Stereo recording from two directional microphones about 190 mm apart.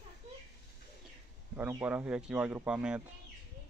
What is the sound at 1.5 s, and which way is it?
Speech, 10° right (ahead or behind).